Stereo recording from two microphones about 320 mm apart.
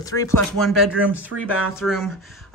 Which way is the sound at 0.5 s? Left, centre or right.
Centre.